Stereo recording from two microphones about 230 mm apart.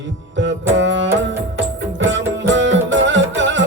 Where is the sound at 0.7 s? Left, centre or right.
Right.